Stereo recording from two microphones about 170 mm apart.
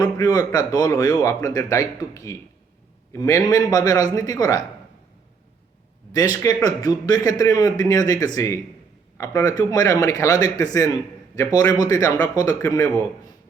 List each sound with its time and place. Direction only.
0.0 s speech: 20° left (ahead or behind)
6.1 s speech: 20° left (ahead or behind)